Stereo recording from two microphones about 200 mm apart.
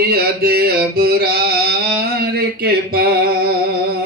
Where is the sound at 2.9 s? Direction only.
50° right (ahead or behind).